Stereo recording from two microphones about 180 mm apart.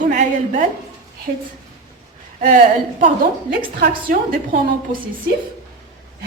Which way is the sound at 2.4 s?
45° right (ahead or behind).